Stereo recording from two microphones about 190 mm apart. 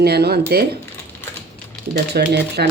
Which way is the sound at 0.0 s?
55° right (ahead or behind).